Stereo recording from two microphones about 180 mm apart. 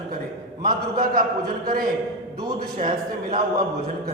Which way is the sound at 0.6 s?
50° right (ahead or behind).